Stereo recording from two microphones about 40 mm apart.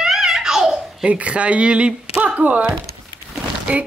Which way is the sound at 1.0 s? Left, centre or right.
Right.